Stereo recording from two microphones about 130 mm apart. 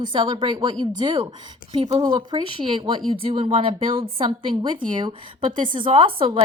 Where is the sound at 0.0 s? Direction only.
35° right (ahead or behind).